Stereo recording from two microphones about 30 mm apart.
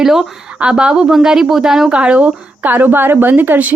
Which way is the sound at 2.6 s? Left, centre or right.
Right.